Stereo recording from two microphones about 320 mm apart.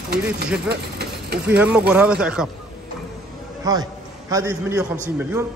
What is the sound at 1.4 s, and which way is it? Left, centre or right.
A man's voice, centre.